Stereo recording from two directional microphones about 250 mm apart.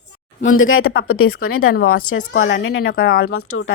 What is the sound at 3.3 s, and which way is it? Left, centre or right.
Speech, left.